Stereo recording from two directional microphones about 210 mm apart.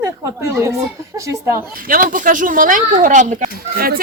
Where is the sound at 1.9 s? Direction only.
40° right (ahead or behind).